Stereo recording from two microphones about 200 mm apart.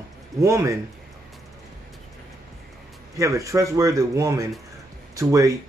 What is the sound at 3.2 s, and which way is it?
Speech, 15° right (ahead or behind).